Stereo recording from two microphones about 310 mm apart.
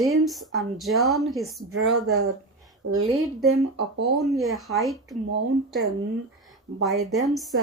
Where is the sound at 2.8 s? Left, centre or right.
Right.